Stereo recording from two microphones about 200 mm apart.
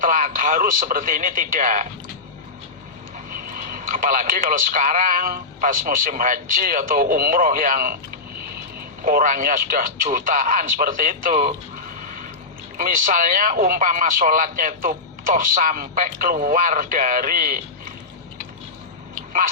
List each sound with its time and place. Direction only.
0.0 s speech: 45° right (ahead or behind)
3.5 s speech: 45° right (ahead or behind)
9.0 s speech: 40° right (ahead or behind)
12.7 s speech: 40° right (ahead or behind)